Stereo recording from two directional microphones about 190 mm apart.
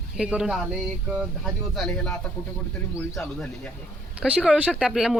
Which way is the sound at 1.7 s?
5° left (ahead or behind).